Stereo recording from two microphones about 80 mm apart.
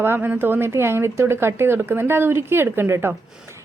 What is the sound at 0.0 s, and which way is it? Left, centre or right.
A woman's voice, right.